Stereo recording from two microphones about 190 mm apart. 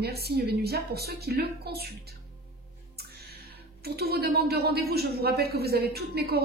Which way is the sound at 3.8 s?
55° right (ahead or behind).